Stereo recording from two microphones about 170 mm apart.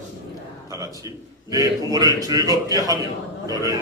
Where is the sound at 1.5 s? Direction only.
20° right (ahead or behind).